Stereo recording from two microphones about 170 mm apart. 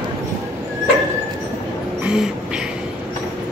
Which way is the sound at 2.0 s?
5° right (ahead or behind).